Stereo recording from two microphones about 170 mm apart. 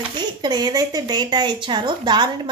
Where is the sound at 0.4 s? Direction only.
25° right (ahead or behind).